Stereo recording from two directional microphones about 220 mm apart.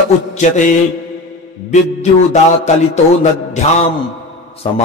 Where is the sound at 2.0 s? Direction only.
30° left (ahead or behind).